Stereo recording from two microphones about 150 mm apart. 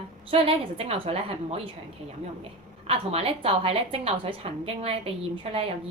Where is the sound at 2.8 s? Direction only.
40° right (ahead or behind).